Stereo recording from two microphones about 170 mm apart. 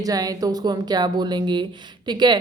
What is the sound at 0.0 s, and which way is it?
A woman's voice, 20° right (ahead or behind).